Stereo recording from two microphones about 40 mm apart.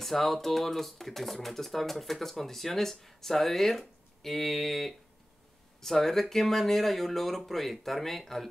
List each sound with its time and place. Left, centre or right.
0.0 s speech: centre